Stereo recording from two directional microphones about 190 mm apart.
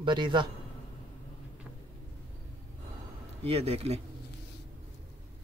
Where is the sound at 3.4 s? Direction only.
35° right (ahead or behind).